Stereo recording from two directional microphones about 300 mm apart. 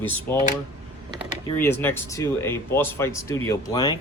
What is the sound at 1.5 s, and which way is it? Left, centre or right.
Speech, centre.